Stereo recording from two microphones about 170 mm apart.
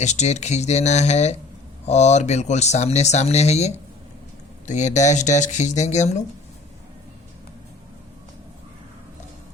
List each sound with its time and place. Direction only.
0.0 s speech: 40° left (ahead or behind)